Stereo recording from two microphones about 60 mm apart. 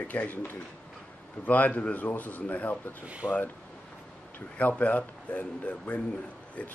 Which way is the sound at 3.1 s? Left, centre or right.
Right.